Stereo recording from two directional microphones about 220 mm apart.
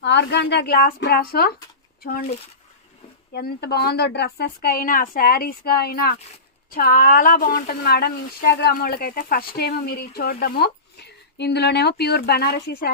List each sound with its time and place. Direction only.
0.0 s speech: 50° left (ahead or behind)
3.3 s speech: 45° left (ahead or behind)